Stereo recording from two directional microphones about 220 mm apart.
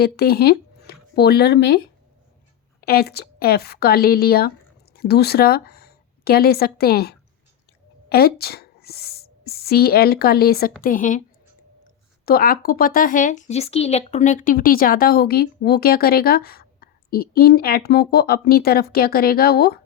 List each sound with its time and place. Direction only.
0.0 s speech: 45° left (ahead or behind)
2.8 s a woman's voice: 45° left (ahead or behind)
12.2 s speech: 40° left (ahead or behind)